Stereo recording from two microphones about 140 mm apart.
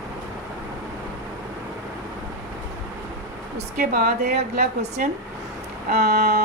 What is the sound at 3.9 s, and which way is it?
A woman's voice, 85° right.